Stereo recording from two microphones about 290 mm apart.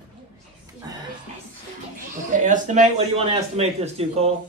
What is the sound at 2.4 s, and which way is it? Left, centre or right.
A man's voice, right.